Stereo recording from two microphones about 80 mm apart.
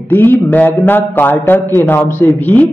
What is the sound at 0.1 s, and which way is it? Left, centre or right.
A man's voice, left.